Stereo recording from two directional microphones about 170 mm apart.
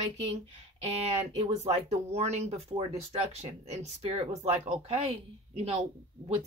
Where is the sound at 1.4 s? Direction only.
40° right (ahead or behind).